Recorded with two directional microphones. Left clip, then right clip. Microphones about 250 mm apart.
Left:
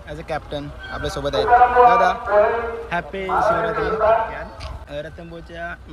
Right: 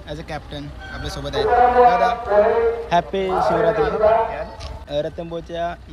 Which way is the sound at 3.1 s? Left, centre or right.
Right.